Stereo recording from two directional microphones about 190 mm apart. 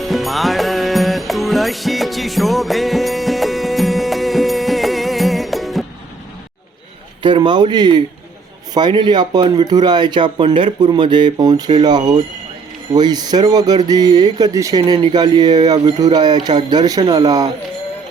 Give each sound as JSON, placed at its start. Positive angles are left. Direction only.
{"t": 0.0, "sound": "music", "side_deg": 0}
{"t": 7.2, "sound": "speech", "side_deg": -25}